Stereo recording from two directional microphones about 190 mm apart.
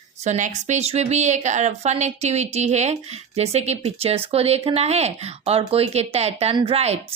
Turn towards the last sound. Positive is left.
turn(degrees=-35)  # may be behind; listen again after turning